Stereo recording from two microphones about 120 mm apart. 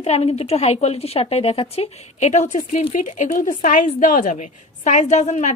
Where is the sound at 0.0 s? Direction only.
60° left (ahead or behind).